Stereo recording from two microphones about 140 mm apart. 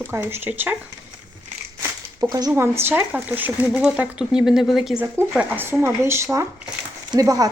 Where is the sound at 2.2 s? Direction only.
25° right (ahead or behind).